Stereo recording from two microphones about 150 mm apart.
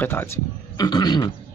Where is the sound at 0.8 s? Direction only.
30° left (ahead or behind).